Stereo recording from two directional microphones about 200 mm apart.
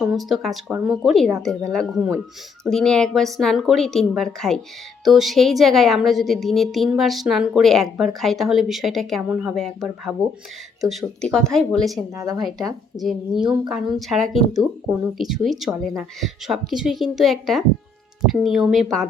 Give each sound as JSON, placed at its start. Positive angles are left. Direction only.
{"t": 0.0, "sound": "a woman's voice", "side_deg": 0}
{"t": 12.1, "sound": "speech", "side_deg": -20}
{"t": 12.4, "sound": "a woman's voice", "side_deg": 0}